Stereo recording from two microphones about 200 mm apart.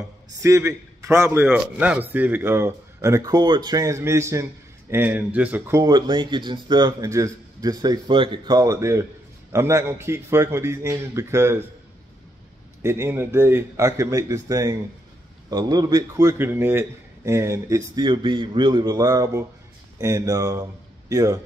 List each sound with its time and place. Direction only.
0.3 s a man's voice: 15° right (ahead or behind)
12.8 s a man's voice: 10° right (ahead or behind)